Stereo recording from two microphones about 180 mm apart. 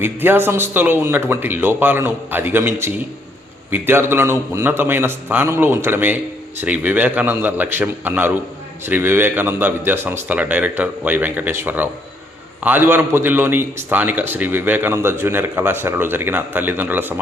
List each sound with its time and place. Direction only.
0.0 s a man's voice: 10° right (ahead or behind)